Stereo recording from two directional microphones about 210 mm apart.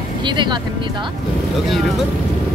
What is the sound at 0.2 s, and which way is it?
Speech, 20° right (ahead or behind).